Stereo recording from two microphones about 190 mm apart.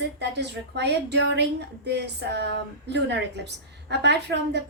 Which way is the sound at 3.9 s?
65° right (ahead or behind).